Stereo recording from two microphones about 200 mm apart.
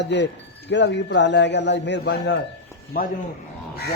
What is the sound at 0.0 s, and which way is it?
A man's voice, 60° left (ahead or behind).